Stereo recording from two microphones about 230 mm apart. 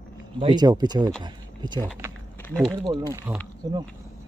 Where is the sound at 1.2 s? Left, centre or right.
Centre.